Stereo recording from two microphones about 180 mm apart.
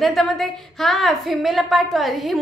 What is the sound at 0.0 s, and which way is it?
A woman's voice, centre (ahead or behind).